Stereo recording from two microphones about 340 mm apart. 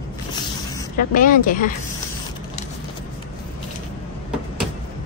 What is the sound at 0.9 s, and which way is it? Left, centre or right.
Speech, left.